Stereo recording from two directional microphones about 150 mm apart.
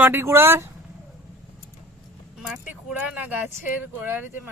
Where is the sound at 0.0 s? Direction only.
15° right (ahead or behind).